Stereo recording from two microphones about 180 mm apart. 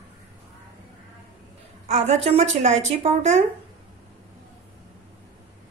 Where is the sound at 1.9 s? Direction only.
35° right (ahead or behind).